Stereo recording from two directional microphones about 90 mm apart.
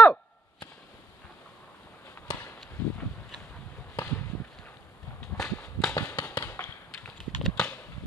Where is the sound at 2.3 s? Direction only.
60° left (ahead or behind).